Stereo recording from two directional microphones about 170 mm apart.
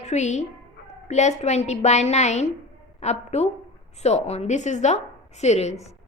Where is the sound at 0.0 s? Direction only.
40° left (ahead or behind).